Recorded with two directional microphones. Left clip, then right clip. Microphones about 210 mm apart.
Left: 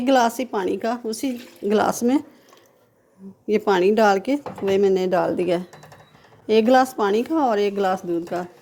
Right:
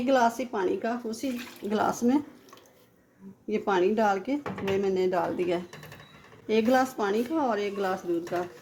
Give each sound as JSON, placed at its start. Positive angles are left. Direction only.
{"t": 0.0, "sound": "speech", "side_deg": 40}
{"t": 3.4, "sound": "speech", "side_deg": 40}